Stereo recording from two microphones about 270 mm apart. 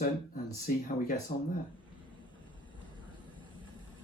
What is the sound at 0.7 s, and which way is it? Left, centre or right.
Speech, left.